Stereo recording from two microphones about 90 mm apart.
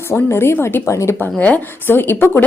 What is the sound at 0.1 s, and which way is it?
Speech, 30° left (ahead or behind).